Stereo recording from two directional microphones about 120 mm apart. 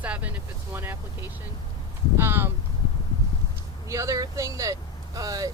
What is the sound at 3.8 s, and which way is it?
Speech, 25° right (ahead or behind).